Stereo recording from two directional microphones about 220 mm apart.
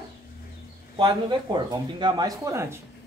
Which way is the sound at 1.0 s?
15° right (ahead or behind).